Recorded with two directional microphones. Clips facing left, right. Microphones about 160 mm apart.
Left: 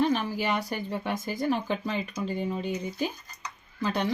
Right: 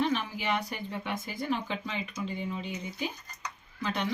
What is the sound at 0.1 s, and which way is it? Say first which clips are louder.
Speech: left 3 dB; 40° left (ahead or behind).